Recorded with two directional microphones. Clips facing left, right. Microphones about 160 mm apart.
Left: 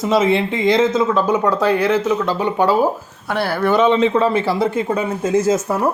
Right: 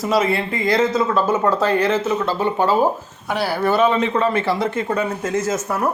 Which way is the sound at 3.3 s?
15° right (ahead or behind).